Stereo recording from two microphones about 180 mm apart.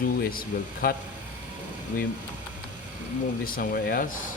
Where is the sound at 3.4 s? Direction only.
55° left (ahead or behind).